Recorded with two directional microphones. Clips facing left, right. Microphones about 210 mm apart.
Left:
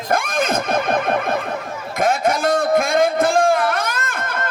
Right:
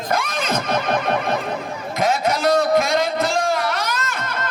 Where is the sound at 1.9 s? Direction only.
50° left (ahead or behind).